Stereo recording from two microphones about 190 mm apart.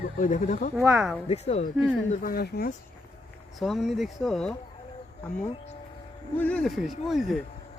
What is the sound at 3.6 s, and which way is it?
Speech, centre (ahead or behind).